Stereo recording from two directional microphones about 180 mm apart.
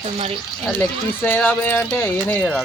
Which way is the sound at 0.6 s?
10° left (ahead or behind).